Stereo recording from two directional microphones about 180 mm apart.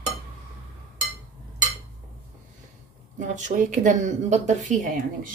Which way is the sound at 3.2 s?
45° right (ahead or behind).